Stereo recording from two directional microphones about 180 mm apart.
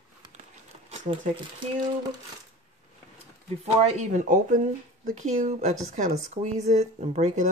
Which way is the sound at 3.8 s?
35° right (ahead or behind).